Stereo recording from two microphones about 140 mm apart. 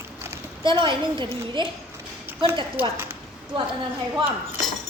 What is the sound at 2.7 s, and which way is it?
Speech, 15° right (ahead or behind).